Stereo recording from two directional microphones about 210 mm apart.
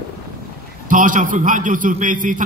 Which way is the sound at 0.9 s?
40° right (ahead or behind).